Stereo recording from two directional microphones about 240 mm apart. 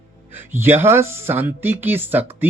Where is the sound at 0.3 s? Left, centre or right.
Centre.